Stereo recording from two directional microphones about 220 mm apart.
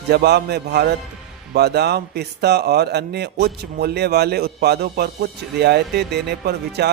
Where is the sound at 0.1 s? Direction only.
50° right (ahead or behind).